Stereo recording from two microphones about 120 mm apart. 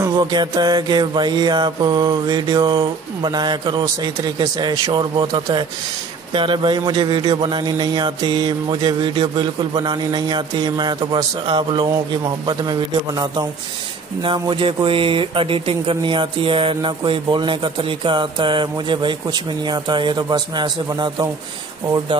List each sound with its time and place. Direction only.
0.2 s speech: 35° right (ahead or behind)
14.2 s speech: 45° right (ahead or behind)